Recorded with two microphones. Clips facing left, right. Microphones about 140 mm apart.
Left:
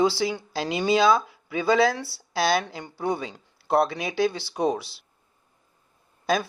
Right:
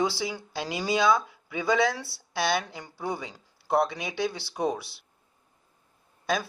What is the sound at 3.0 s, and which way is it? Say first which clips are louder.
Speech: left 5 dB; 65° left (ahead or behind).